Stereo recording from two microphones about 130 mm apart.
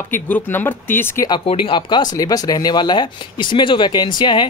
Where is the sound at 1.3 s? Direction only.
40° left (ahead or behind).